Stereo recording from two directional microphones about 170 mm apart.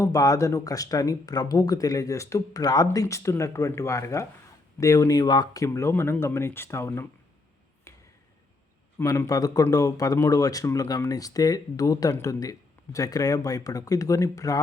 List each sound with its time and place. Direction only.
0.0 s speech: 20° left (ahead or behind)
7.9 s a sound: 20° left (ahead or behind)
9.0 s speech: 20° left (ahead or behind)